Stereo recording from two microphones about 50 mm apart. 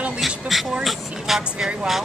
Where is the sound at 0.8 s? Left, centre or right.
Centre.